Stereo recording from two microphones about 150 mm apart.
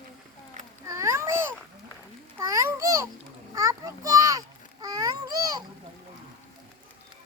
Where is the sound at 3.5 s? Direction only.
25° right (ahead or behind).